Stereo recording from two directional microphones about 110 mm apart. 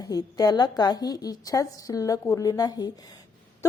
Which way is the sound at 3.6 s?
30° left (ahead or behind).